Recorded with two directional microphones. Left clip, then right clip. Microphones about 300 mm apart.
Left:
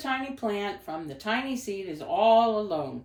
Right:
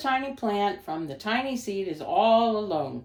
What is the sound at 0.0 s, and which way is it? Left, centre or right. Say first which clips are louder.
A woman's voice: right 3 dB; centre.